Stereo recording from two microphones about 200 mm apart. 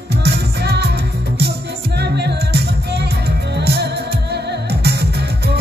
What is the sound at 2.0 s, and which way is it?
Music, 55° right (ahead or behind).